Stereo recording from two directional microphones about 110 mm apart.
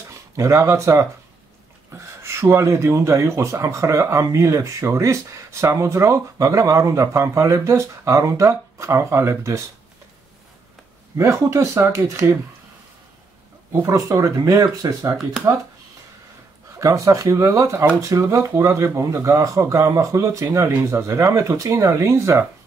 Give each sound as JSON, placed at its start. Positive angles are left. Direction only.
{"t": 0.4, "sound": "speech", "side_deg": -25}
{"t": 11.1, "sound": "speech", "side_deg": -30}
{"t": 13.8, "sound": "speech", "side_deg": -30}
{"t": 16.7, "sound": "speech", "side_deg": -30}